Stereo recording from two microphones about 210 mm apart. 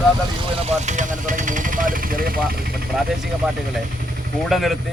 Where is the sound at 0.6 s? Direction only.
35° right (ahead or behind).